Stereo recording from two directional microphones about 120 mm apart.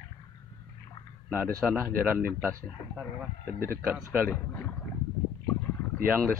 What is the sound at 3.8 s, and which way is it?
Speech, 15° right (ahead or behind).